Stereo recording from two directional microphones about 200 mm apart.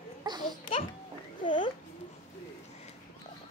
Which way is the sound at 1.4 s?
25° left (ahead or behind).